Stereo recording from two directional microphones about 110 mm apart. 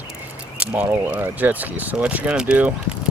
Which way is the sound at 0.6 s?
15° right (ahead or behind).